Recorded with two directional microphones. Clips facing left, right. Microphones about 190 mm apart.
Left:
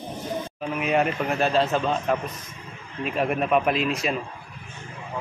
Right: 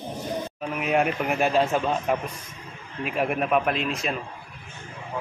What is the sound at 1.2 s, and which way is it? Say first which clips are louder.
A man's voice: even; 15° right (ahead or behind).